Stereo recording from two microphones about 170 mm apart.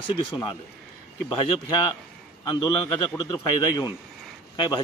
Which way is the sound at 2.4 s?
25° left (ahead or behind).